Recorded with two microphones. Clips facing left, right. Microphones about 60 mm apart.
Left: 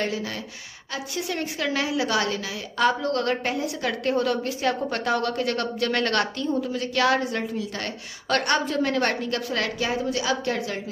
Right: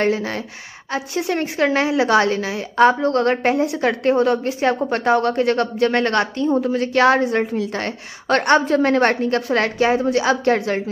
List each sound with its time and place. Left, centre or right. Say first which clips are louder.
0.0 s a woman's voice: right 8 dB; right
6.5 s a woman's voice: right 9 dB; right